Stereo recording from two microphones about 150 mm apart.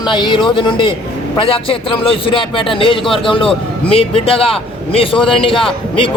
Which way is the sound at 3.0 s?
Centre (ahead or behind).